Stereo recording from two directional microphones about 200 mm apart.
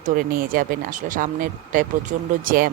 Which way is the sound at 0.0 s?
45° right (ahead or behind).